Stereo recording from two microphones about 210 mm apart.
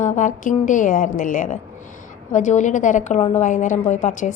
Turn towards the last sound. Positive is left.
turn(degrees=35)  # may be behind; listen again after turning